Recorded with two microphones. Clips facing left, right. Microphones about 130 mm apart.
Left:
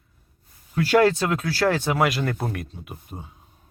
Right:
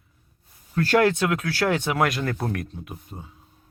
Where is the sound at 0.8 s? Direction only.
10° left (ahead or behind).